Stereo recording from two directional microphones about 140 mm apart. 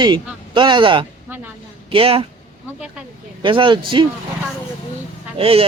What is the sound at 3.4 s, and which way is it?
Speech, 35° right (ahead or behind).